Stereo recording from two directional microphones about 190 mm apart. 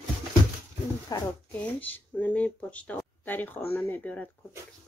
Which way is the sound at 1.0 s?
20° left (ahead or behind).